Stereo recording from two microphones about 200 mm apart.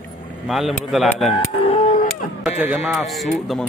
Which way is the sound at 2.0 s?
5° right (ahead or behind).